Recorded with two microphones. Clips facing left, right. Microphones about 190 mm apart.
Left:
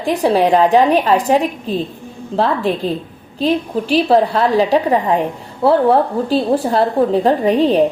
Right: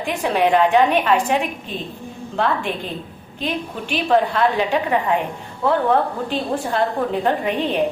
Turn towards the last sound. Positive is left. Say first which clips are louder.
# left 8 dB
turn(degrees=35)  # may be behind; listen again after turning